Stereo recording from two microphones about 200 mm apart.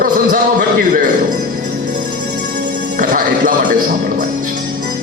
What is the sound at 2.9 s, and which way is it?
Speech, 40° right (ahead or behind).